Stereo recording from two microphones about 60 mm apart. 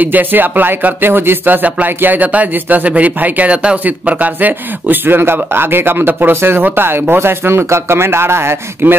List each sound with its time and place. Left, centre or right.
0.0 s speech: right